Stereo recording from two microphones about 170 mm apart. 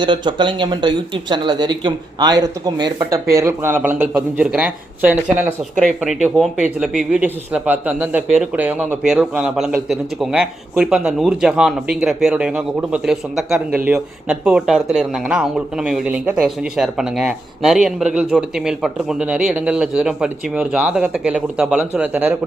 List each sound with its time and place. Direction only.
0.0 s speech: 30° right (ahead or behind); by 5.5 s 10° right (ahead or behind)
6.7 s speech: 5° right (ahead or behind)